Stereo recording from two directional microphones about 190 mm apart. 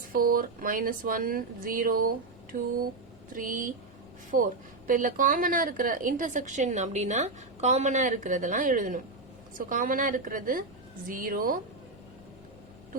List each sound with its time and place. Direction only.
0.1 s speech: 50° right (ahead or behind)